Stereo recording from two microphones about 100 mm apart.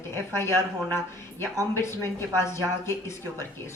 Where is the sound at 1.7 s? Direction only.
25° left (ahead or behind).